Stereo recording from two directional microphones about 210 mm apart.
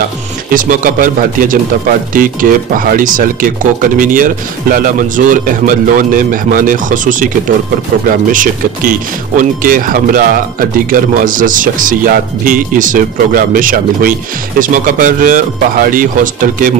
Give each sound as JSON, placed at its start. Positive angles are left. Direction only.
{"t": 0.5, "sound": "speech", "side_deg": -40}